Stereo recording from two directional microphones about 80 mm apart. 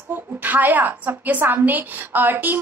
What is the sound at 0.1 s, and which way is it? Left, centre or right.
A woman's voice, right.